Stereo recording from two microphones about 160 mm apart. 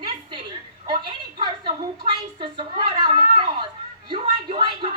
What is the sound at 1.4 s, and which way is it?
A woman's voice, 30° right (ahead or behind).